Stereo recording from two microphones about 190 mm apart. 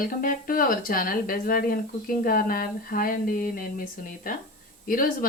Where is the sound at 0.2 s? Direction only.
50° left (ahead or behind).